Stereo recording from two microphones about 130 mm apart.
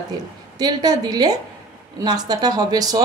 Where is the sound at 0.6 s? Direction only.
30° right (ahead or behind).